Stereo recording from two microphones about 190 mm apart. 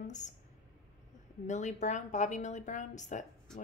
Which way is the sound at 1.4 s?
40° left (ahead or behind).